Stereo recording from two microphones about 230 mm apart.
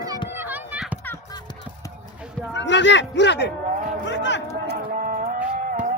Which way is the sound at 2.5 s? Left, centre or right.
Left.